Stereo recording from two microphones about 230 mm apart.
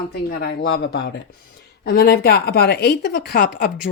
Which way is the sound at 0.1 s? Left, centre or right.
Left.